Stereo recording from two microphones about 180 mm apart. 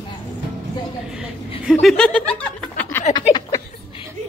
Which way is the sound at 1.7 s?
5° left (ahead or behind).